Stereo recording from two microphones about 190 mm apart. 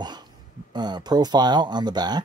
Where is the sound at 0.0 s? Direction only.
20° right (ahead or behind).